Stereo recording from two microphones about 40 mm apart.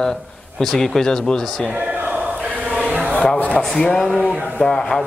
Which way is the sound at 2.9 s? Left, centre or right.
Right.